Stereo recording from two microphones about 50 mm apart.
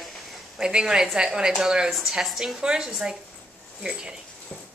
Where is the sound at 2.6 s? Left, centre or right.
Centre.